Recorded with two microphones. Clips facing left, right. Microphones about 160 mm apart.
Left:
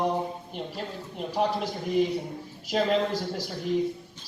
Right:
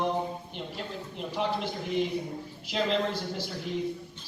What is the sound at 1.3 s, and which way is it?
A man's voice, 40° left (ahead or behind).